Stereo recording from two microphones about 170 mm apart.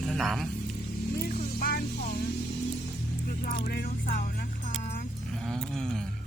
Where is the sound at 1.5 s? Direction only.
60° left (ahead or behind).